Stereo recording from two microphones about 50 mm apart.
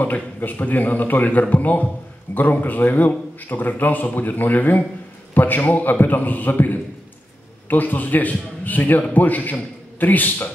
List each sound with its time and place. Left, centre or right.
0.0 s a man's voice: left